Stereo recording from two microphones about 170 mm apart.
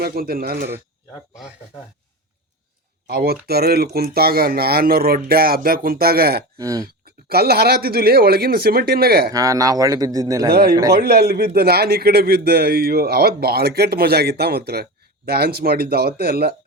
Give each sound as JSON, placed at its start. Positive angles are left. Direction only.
{"t": 0.0, "sound": "speech", "side_deg": -65}
{"t": 3.1, "sound": "speech", "side_deg": -70}
{"t": 6.6, "sound": "speech", "side_deg": -20}
{"t": 7.0, "sound": "speech", "side_deg": -65}
{"t": 9.3, "sound": "speech", "side_deg": -20}
{"t": 10.5, "sound": "a man's voice", "side_deg": -60}